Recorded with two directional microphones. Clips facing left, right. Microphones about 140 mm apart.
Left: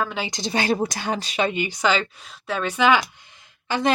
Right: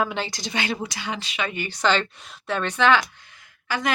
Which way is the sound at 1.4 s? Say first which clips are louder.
Left 1 dB; 20° left (ahead or behind).